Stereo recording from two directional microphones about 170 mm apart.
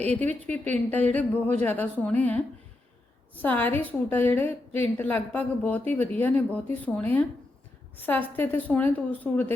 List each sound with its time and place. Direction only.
0.0 s a woman's voice: 10° left (ahead or behind)
3.4 s a woman's voice: 10° left (ahead or behind)